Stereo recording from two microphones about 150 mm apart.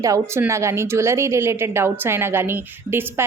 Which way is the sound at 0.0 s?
20° right (ahead or behind).